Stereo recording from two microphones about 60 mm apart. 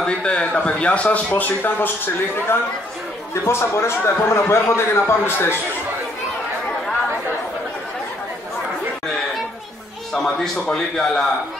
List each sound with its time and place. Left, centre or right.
0.0 s a man's voice: centre
3.4 s a man's voice: left
10.1 s a man's voice: centre